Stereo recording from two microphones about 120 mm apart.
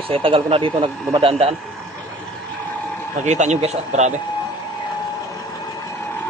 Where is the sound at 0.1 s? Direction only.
50° right (ahead or behind).